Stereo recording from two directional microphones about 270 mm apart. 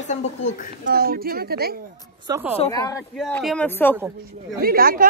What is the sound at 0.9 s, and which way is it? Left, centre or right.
Speech, right.